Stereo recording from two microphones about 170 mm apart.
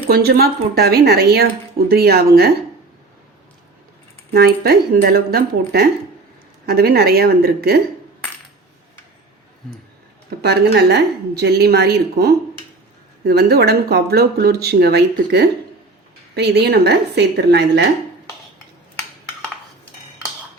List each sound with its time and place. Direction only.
0.1 s speech: 70° right (ahead or behind)
4.3 s speech: 65° right (ahead or behind)
10.2 s speech: 75° right (ahead or behind)